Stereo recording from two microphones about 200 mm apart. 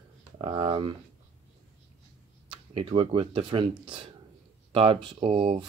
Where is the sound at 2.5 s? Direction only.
30° right (ahead or behind).